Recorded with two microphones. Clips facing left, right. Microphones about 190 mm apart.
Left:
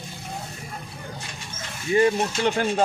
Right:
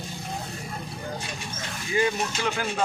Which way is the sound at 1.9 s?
30° left (ahead or behind).